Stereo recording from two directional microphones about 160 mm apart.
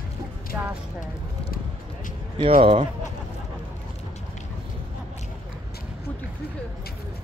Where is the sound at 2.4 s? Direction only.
35° right (ahead or behind).